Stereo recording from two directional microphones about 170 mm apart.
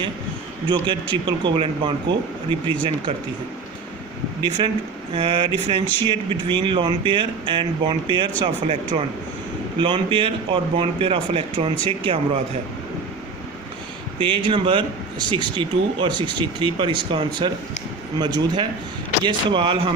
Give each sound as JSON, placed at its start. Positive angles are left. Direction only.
{"t": 1.1, "sound": "speech", "side_deg": -30}
{"t": 4.4, "sound": "speech", "side_deg": -25}
{"t": 14.2, "sound": "speech", "side_deg": -30}